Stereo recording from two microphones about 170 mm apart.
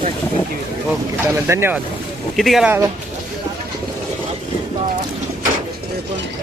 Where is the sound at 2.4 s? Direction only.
Centre (ahead or behind).